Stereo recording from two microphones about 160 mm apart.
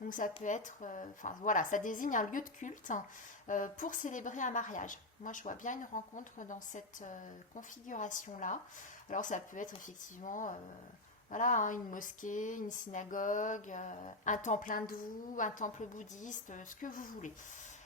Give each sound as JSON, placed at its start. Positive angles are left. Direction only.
{"t": 0.0, "sound": "speech", "side_deg": 55}